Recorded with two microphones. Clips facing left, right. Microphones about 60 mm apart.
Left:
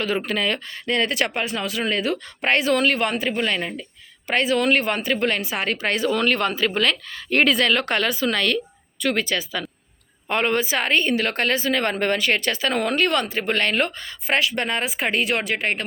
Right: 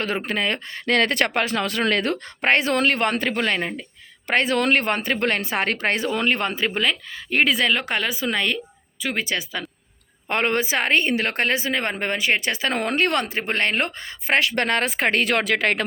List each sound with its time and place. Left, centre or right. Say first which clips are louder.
0.2 s a woman's voice: left 1 dB; right
0.9 s speech: right 2 dB; right
2.4 s a woman's voice: even; right
3.6 s a woman's voice: right 1 dB; right
4.3 s a woman's voice: even; right
6.8 s a woman's voice: left 1 dB; centre
10.2 s a woman's voice: even; right; by 12.4 s centre
12.5 s a woman's voice: left 1 dB; right
14.5 s speech: right 3 dB; right